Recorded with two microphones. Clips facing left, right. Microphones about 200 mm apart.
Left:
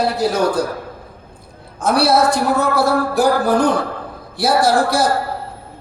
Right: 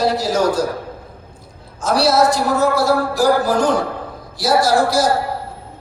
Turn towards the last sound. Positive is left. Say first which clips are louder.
# even
turn(degrees=60)  # may be behind; listen again after turning